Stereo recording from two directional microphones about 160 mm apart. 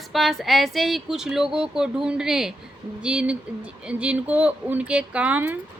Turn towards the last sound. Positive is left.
turn(degrees=-10)  # may be behind; listen again after turning